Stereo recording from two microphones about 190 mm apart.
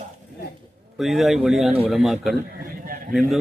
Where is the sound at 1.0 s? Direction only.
Centre (ahead or behind).